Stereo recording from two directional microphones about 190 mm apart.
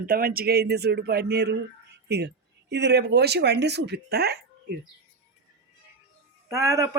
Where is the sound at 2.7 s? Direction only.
60° right (ahead or behind).